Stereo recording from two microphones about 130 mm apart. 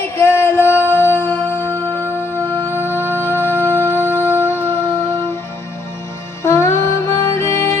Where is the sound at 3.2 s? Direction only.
15° left (ahead or behind).